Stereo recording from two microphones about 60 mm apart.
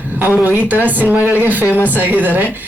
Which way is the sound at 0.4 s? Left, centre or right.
Right.